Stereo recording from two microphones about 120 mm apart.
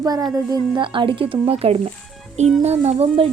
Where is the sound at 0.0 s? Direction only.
30° right (ahead or behind).